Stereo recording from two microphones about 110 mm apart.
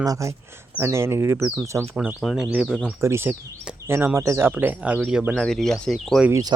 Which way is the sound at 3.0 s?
25° right (ahead or behind).